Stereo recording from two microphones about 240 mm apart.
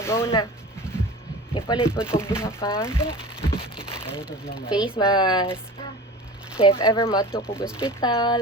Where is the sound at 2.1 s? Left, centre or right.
Centre.